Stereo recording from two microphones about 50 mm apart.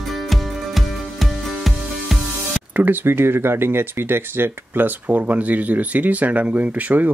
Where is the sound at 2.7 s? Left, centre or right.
Right.